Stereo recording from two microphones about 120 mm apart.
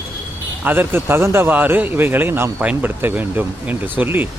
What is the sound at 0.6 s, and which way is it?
Speech, 15° right (ahead or behind).